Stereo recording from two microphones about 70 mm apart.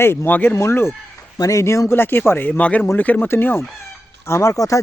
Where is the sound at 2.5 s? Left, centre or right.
Centre.